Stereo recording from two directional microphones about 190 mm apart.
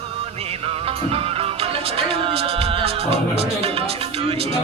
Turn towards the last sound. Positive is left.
turn(degrees=-30)  # may be behind; listen again after turning